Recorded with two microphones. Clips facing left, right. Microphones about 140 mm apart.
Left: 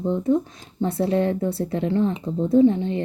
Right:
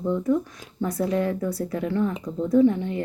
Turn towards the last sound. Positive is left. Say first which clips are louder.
# left 2 dB
turn(degrees=25)  # may be behind; listen again after turning